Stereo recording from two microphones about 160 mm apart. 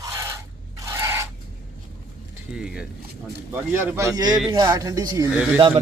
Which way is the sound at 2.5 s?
5° right (ahead or behind).